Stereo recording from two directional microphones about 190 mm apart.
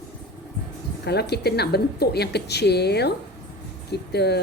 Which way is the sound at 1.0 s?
60° left (ahead or behind).